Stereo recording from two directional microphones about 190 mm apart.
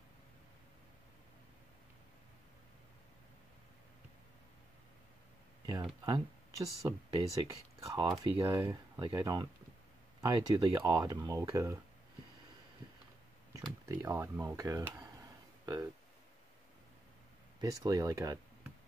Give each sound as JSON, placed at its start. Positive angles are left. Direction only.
{"t": 5.7, "sound": "speech", "side_deg": -20}
{"t": 13.6, "sound": "speech", "side_deg": -15}
{"t": 17.6, "sound": "speech", "side_deg": -20}